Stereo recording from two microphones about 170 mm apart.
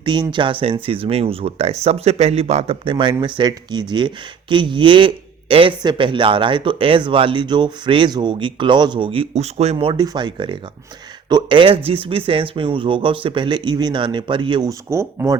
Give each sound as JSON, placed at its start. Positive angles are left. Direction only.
{"t": 0.0, "sound": "speech", "side_deg": -25}